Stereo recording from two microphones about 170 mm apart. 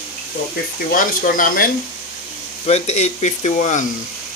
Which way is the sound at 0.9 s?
50° left (ahead or behind).